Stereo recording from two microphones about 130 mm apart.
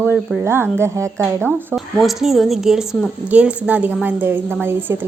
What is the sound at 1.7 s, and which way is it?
A woman's voice, centre (ahead or behind).